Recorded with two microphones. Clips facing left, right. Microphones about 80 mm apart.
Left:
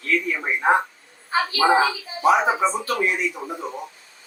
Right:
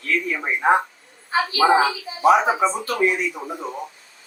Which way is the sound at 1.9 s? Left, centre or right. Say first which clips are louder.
Right 2 dB; centre.